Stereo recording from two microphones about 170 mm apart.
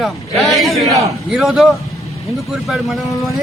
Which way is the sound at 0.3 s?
Centre (ahead or behind).